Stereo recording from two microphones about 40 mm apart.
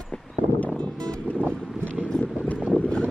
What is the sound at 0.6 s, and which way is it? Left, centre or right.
Music, left.